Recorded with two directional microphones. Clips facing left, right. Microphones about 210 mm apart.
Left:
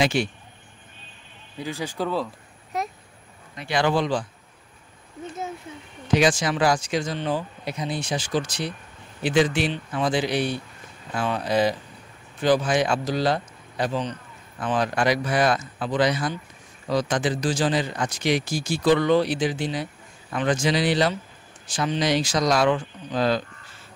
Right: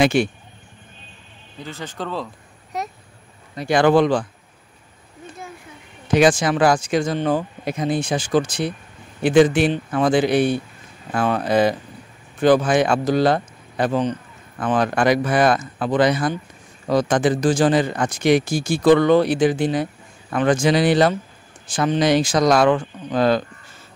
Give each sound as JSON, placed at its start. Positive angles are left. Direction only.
{"t": 0.0, "sound": "a man's voice", "side_deg": -55}
{"t": 1.6, "sound": "speech", "side_deg": 10}
{"t": 2.7, "sound": "a sound", "side_deg": 0}
{"t": 3.5, "sound": "a man's voice", "side_deg": -45}
{"t": 6.1, "sound": "a man's voice", "side_deg": -50}